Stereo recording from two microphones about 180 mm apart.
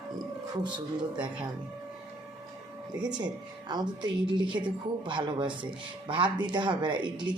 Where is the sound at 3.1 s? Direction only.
25° right (ahead or behind).